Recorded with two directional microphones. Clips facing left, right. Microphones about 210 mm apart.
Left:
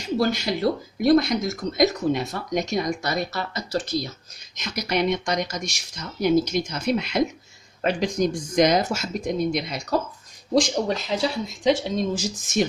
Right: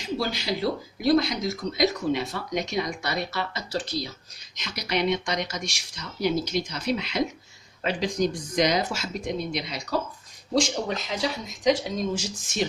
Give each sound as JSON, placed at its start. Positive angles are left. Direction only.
{"t": 0.2, "sound": "a woman's voice", "side_deg": 45}